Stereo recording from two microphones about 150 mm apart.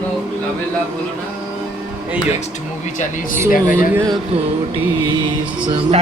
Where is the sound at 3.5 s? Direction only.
65° left (ahead or behind).